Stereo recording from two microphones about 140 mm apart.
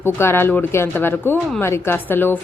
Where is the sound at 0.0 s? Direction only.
15° left (ahead or behind).